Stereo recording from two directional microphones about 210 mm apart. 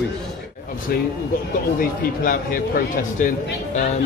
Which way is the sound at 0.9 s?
45° left (ahead or behind).